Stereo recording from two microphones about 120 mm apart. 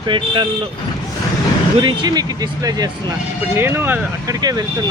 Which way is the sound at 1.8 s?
35° right (ahead or behind).